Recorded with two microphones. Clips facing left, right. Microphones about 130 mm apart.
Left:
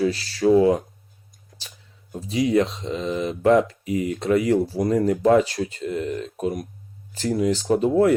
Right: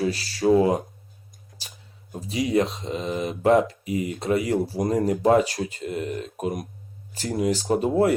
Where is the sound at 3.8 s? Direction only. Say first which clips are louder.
Left 2 dB; 40° left (ahead or behind).